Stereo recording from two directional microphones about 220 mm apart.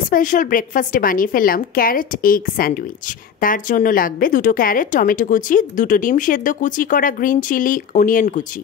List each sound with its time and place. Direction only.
0.1 s a woman's voice: 35° left (ahead or behind)